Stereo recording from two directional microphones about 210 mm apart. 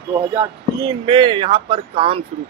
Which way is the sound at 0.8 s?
20° right (ahead or behind).